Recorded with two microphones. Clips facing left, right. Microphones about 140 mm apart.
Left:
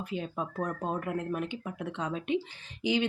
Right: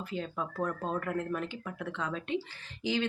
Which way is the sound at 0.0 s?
20° left (ahead or behind).